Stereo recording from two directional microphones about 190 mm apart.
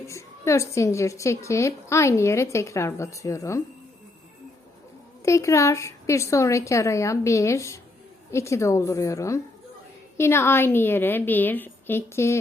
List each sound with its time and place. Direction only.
0.0 s a woman's voice: 15° left (ahead or behind)
5.2 s a woman's voice: 15° left (ahead or behind)